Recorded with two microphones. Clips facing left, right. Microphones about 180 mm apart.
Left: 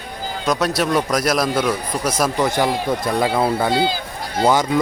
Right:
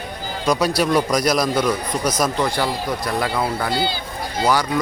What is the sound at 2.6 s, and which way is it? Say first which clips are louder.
Speech: left 3 dB; 25° left (ahead or behind).